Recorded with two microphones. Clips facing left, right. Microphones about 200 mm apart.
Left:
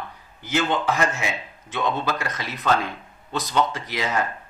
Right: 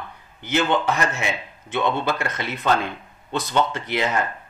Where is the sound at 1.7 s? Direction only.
30° right (ahead or behind).